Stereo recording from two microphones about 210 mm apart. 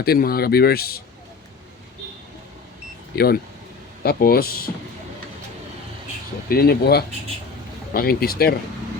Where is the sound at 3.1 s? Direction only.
45° left (ahead or behind).